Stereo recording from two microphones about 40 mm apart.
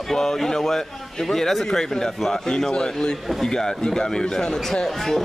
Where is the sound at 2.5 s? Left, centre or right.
Centre.